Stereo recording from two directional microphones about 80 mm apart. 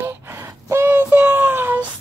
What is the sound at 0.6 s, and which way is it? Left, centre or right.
Child singing, right.